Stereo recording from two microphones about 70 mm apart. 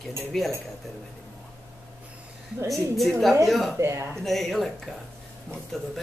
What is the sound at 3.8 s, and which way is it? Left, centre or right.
Speech, right.